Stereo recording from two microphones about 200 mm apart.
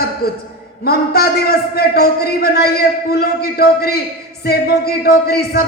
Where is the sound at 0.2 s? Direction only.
50° left (ahead or behind).